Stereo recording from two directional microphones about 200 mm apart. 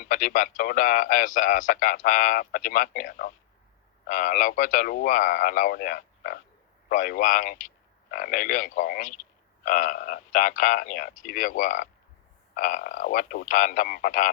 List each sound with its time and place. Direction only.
0.0 s a man's voice: 40° left (ahead or behind)